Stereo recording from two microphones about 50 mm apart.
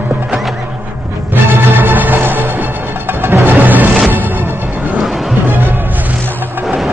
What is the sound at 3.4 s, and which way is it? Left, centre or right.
Music, right.